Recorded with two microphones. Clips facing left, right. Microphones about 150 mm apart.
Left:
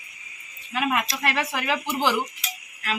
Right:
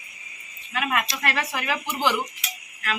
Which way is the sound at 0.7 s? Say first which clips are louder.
Left 1 dB; 25° left (ahead or behind).